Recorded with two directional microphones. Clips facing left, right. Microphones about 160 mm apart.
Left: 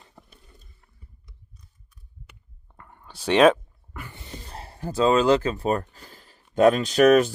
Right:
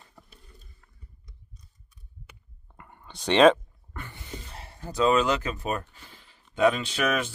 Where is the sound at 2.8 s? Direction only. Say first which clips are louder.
Left 1 dB; 5° right (ahead or behind).